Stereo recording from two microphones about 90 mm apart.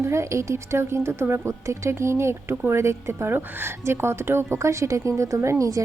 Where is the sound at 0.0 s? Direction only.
30° right (ahead or behind).